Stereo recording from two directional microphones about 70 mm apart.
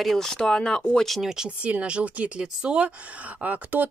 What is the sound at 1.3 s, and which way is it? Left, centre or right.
Speech, centre.